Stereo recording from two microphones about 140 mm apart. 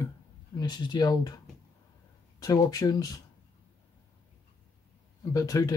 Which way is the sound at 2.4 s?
25° left (ahead or behind).